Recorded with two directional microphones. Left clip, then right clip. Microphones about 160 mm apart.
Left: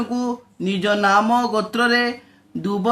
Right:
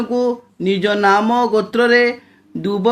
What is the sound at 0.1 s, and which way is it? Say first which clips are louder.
A man's voice: right 8 dB; 20° right (ahead or behind).